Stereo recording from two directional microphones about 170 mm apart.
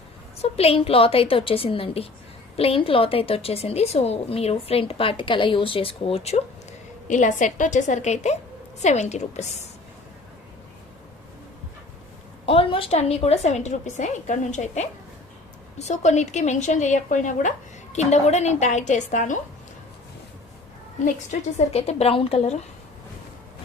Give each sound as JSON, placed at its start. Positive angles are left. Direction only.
{"t": 0.4, "sound": "a woman's voice", "side_deg": 35}
{"t": 7.1, "sound": "a woman's voice", "side_deg": 45}
{"t": 12.5, "sound": "a woman's voice", "side_deg": 30}
{"t": 21.0, "sound": "a woman's voice", "side_deg": 40}